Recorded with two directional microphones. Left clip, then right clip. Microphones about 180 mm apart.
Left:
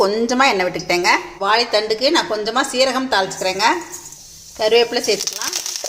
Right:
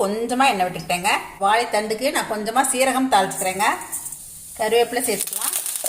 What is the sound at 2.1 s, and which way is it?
A woman's voice, 25° left (ahead or behind).